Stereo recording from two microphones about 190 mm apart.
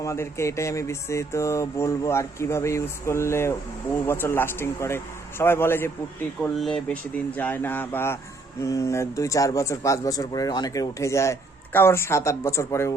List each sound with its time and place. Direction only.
0.0 s speech: 15° left (ahead or behind)